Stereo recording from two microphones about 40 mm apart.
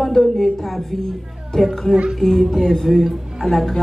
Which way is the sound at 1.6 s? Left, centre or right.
Centre.